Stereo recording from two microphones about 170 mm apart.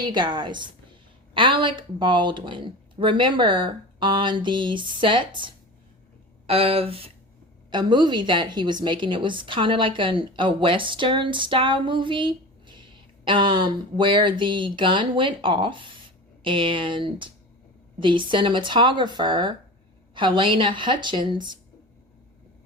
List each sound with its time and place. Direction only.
0.0 s a woman's voice: 25° right (ahead or behind)